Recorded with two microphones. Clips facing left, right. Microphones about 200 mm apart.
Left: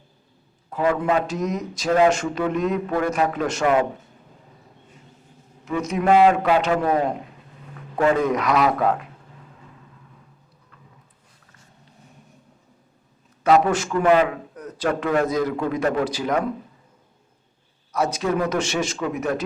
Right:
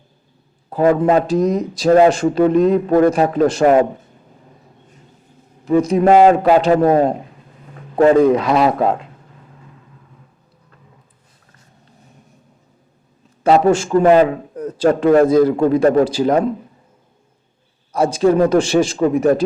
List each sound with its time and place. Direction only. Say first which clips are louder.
0.7 s speech: right 7 dB; 35° right (ahead or behind)
5.6 s a man's voice: right 8 dB; 35° right (ahead or behind)
13.4 s speech: right 5 dB; 30° right (ahead or behind)
17.9 s speech: right 9 dB; 30° right (ahead or behind)